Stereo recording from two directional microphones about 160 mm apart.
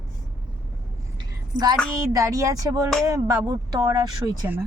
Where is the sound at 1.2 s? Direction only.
25° right (ahead or behind).